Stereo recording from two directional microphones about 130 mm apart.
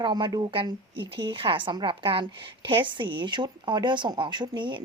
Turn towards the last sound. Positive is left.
turn(degrees=-35)  # may be behind; listen again after turning